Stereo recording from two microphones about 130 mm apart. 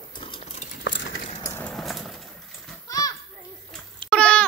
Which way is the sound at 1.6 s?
5° left (ahead or behind).